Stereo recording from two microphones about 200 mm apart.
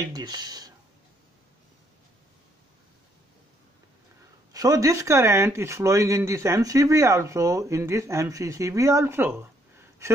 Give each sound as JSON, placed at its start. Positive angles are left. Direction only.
{"t": 0.1, "sound": "speech", "side_deg": -20}
{"t": 4.5, "sound": "speech", "side_deg": -20}